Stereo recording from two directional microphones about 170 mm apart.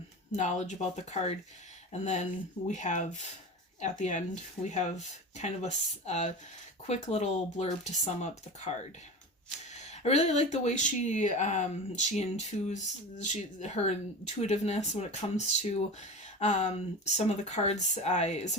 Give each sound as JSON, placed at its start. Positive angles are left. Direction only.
{"t": 0.3, "sound": "speech", "side_deg": 45}
{"t": 9.9, "sound": "speech", "side_deg": 40}